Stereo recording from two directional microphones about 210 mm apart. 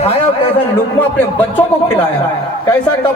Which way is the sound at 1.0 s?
5° left (ahead or behind).